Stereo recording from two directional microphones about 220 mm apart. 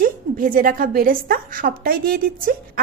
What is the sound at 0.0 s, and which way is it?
Speech, 40° right (ahead or behind).